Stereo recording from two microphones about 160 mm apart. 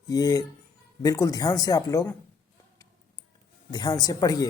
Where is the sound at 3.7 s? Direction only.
25° left (ahead or behind).